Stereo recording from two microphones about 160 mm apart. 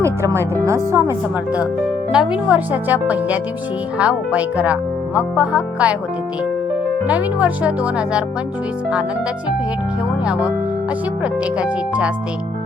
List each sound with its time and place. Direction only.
0.0 s speech: 15° right (ahead or behind)
2.1 s speech: 5° right (ahead or behind)
7.1 s speech: 10° right (ahead or behind)
11.2 s speech: 5° right (ahead or behind)